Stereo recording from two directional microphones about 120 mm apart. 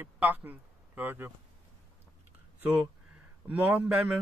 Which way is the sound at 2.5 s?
15° right (ahead or behind).